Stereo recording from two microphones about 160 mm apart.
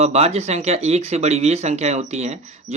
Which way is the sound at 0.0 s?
40° right (ahead or behind).